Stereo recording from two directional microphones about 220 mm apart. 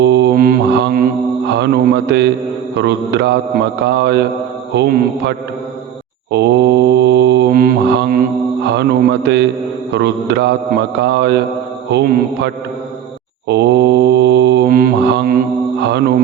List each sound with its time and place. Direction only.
0.0 s mantra: 50° right (ahead or behind)
2.7 s speech: 50° right (ahead or behind)
6.3 s mantra: 50° right (ahead or behind)
8.6 s speech: 50° right (ahead or behind)
13.5 s mantra: 50° right (ahead or behind)
15.8 s speech: 50° right (ahead or behind)